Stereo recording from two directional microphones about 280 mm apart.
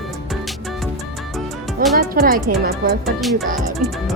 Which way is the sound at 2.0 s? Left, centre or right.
Right.